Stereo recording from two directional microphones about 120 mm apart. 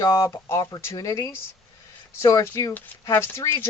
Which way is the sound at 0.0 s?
25° left (ahead or behind).